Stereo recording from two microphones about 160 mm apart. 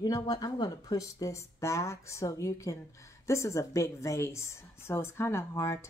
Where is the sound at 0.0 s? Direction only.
25° left (ahead or behind).